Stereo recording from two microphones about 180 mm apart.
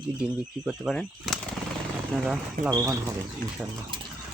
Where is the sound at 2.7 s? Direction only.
15° right (ahead or behind).